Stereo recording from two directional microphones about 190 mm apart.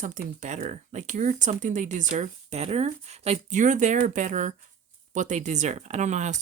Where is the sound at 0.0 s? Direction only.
45° right (ahead or behind).